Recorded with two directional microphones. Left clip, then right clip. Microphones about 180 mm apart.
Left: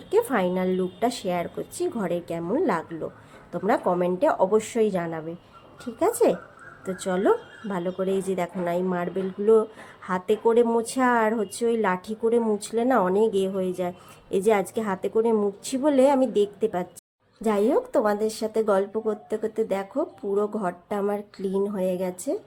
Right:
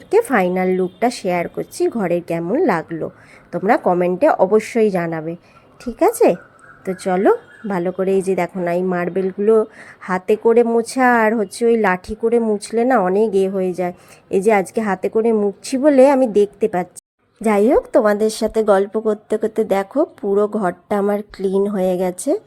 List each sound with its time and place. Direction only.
0.1 s a woman's voice: 30° right (ahead or behind)